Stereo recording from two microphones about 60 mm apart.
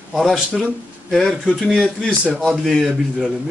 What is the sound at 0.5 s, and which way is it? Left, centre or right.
A man's voice, centre.